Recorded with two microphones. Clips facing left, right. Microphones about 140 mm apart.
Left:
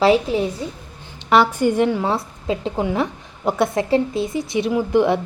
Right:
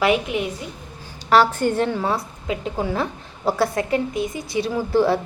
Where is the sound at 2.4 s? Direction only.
25° left (ahead or behind).